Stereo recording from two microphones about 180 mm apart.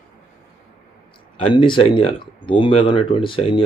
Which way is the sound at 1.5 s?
25° left (ahead or behind).